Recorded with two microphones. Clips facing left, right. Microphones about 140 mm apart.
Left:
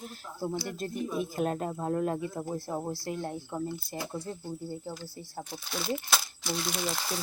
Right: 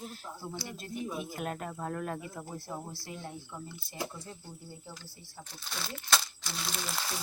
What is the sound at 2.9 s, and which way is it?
Speech, 55° left (ahead or behind).